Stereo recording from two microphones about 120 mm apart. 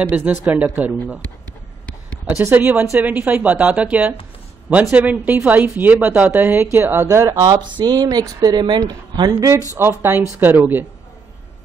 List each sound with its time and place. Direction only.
0.5 s speech: 15° right (ahead or behind)
2.2 s a woman's voice: 15° right (ahead or behind)
9.8 s a woman's voice: 20° right (ahead or behind)